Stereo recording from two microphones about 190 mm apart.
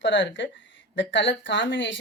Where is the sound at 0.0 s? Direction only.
70° left (ahead or behind).